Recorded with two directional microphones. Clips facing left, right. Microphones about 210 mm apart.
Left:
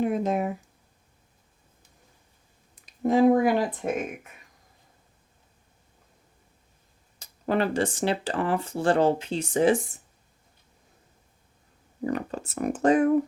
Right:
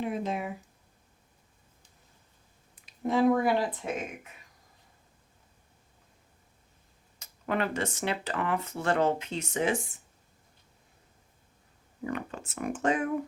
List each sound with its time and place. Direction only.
0.0 s speech: 45° left (ahead or behind)
3.1 s speech: 45° left (ahead or behind)
7.2 s speech: 35° left (ahead or behind)
12.0 s speech: 35° left (ahead or behind)